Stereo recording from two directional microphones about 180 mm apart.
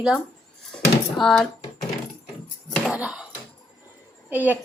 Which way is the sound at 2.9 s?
5° right (ahead or behind).